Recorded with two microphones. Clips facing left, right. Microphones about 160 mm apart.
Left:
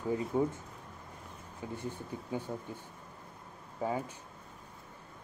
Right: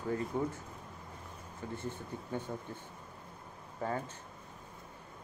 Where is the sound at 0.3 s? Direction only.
15° left (ahead or behind).